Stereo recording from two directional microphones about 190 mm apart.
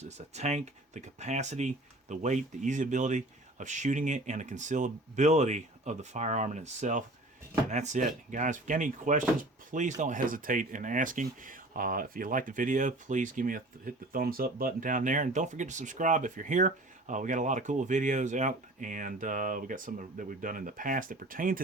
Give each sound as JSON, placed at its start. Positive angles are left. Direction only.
{"t": 0.0, "sound": "speech", "side_deg": -35}